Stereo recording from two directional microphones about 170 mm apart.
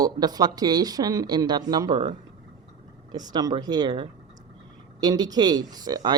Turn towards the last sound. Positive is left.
turn(degrees=-25)  # may be behind; listen again after turning